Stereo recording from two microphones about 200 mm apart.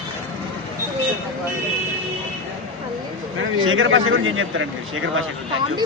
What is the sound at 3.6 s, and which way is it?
A man's voice, 80° right.